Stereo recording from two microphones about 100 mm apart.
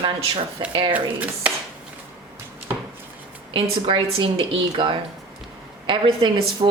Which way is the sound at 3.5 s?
60° right (ahead or behind).